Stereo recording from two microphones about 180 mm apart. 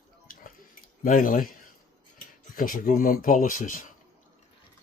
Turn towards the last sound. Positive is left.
turn(degrees=45)  # may be behind; listen again after turning